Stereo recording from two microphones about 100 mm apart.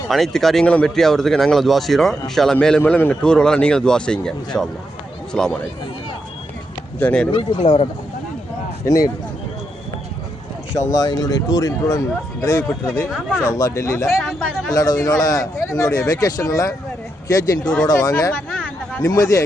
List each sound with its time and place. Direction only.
0.1 s speech: centre (ahead or behind)
7.0 s speech: 10° left (ahead or behind)
7.3 s speech: 60° left (ahead or behind)
8.8 s speech: 35° left (ahead or behind)
10.9 s speech: 40° left (ahead or behind)